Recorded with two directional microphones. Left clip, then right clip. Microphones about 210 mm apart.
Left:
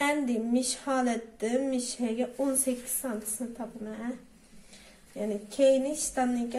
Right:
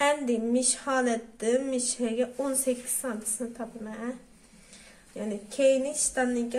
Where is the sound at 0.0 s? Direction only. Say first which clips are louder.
Right 3 dB; 35° right (ahead or behind).